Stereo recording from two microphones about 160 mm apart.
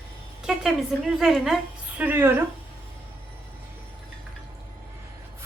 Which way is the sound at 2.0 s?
15° right (ahead or behind).